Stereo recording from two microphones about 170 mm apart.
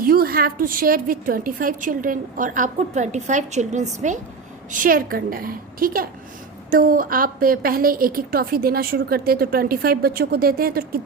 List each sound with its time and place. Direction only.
0.0 s a woman's voice: 60° right (ahead or behind)